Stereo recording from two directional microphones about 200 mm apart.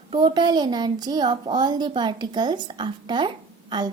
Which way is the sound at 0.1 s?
25° right (ahead or behind).